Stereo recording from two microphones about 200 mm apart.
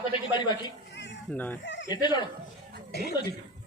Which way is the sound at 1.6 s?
60° left (ahead or behind).